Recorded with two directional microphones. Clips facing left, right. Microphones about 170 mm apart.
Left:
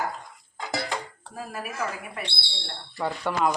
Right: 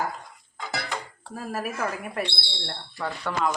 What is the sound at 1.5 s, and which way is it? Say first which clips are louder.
Speech: right 3 dB; 45° right (ahead or behind).